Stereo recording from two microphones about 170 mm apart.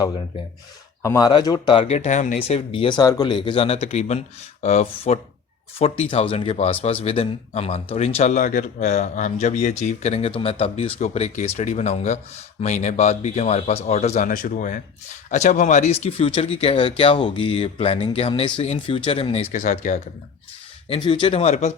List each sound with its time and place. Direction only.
1.0 s speech: 20° left (ahead or behind)
1.8 s speech: 40° left (ahead or behind)
2.7 s speech: 30° left (ahead or behind)
14.3 s speech: 50° left (ahead or behind)
20.8 s speech: 35° left (ahead or behind)